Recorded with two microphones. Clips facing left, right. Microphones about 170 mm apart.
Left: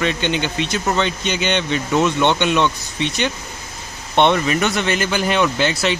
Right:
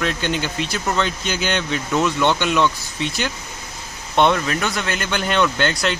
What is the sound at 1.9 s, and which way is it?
Speech, 15° left (ahead or behind).